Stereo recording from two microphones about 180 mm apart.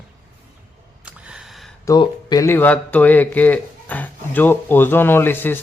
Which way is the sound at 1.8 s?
20° left (ahead or behind).